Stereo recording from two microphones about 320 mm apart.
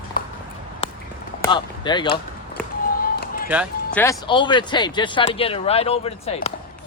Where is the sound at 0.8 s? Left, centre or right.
Centre.